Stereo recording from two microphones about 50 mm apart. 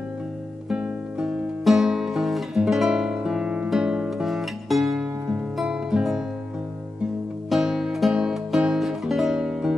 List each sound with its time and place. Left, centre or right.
0.7 s music: centre
1.6 s guitar: centre
3.7 s music: centre
4.3 s music: centre
5.7 s music: centre
7.6 s music: centre
8.1 s music: centre